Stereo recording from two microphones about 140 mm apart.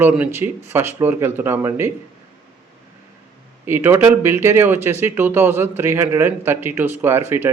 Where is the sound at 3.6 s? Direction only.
15° right (ahead or behind).